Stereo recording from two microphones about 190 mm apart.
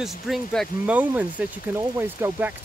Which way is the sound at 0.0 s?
Centre (ahead or behind).